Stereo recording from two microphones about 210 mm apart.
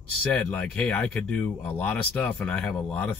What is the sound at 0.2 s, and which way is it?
Speech, 5° left (ahead or behind).